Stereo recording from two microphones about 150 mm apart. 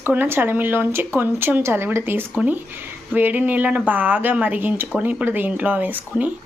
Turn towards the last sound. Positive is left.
turn(degrees=-10)  # may be behind; listen again after turning